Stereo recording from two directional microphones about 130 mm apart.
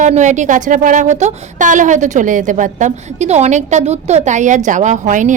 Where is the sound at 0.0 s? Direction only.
65° right (ahead or behind).